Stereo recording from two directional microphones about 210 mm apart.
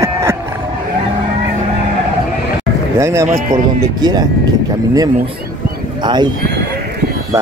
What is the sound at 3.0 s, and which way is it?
Speech, 15° right (ahead or behind).